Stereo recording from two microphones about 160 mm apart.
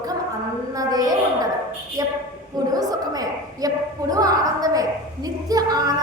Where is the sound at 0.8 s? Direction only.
25° right (ahead or behind).